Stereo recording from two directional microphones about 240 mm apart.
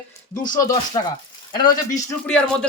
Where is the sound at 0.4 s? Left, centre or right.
Left.